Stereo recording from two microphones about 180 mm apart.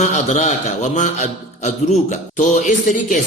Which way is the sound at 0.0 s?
40° left (ahead or behind).